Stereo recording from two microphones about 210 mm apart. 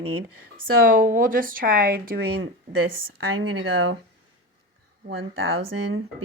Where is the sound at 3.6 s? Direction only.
60° right (ahead or behind).